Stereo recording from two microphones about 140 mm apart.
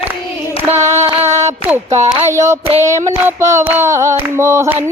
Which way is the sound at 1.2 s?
20° right (ahead or behind).